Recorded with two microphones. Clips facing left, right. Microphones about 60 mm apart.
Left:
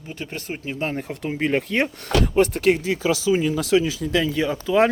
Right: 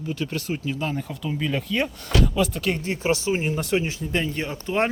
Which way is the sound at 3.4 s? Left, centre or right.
Left.